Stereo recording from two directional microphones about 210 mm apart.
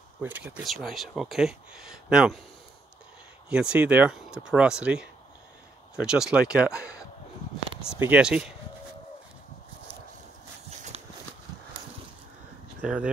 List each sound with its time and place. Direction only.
0.2 s speech: 10° right (ahead or behind)
3.4 s speech: 5° right (ahead or behind)
7.9 s speech: 5° right (ahead or behind)
10.9 s horse: 30° right (ahead or behind)
12.8 s speech: 5° right (ahead or behind)